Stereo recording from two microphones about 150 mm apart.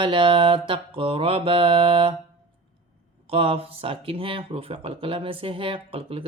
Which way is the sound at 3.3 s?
40° right (ahead or behind).